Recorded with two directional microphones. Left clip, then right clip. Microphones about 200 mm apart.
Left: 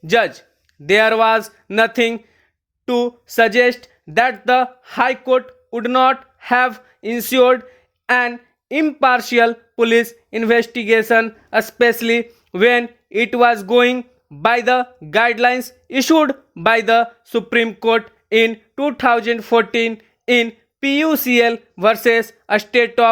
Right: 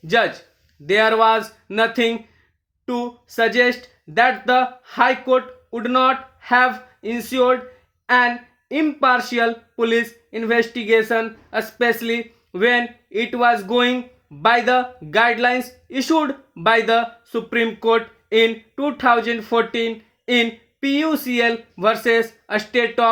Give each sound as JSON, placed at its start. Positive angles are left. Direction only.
{"t": 0.1, "sound": "speech", "side_deg": 40}